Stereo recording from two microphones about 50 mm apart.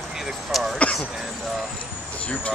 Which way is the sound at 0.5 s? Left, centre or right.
Centre.